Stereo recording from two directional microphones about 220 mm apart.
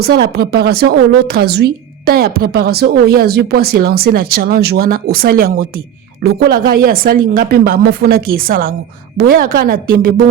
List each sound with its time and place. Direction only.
0.0 s a woman's voice: 45° right (ahead or behind)